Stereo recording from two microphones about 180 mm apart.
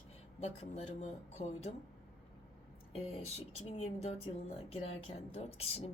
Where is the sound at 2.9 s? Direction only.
35° left (ahead or behind).